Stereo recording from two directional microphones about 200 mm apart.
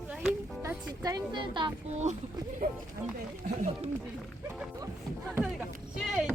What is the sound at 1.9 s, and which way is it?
Speech, 35° right (ahead or behind).